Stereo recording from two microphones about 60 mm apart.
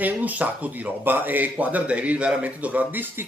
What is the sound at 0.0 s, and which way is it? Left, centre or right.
Speech, right.